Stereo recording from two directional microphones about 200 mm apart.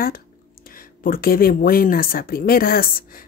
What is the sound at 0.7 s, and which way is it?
Speech, 45° left (ahead or behind).